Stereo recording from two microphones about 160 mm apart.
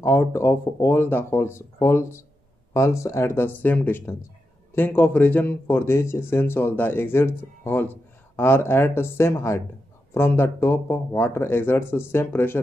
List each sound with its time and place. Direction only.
0.0 s a man's voice: 15° left (ahead or behind)